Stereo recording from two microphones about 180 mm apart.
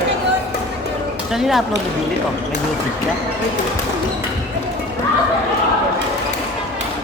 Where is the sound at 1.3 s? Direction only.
Centre (ahead or behind).